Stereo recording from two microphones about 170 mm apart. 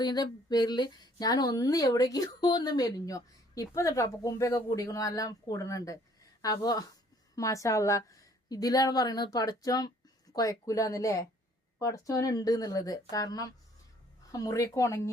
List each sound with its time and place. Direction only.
0.0 s a woman's voice: 25° left (ahead or behind)